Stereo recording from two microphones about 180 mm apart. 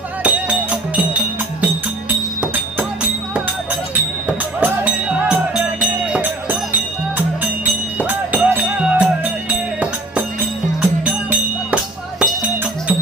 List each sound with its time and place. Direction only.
0.2 s music: 5° right (ahead or behind)
4.3 s music: 5° right (ahead or behind)
8.0 s music: 10° right (ahead or behind)
10.8 s music: 5° right (ahead or behind)